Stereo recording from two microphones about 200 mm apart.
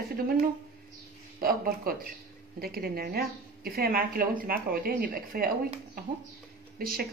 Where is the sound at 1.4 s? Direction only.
50° right (ahead or behind).